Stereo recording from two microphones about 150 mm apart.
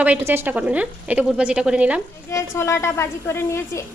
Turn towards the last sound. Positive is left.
turn(degrees=15)  # may be behind; listen again after turning